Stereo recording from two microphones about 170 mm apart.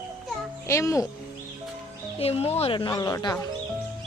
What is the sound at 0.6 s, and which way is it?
Speech, 15° left (ahead or behind).